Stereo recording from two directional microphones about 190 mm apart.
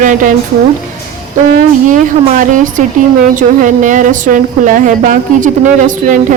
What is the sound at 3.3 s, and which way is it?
A woman's voice, 40° right (ahead or behind).